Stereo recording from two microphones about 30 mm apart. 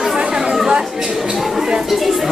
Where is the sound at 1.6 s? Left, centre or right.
Right.